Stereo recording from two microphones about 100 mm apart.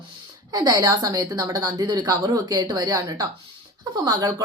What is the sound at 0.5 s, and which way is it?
A woman's voice, 45° right (ahead or behind).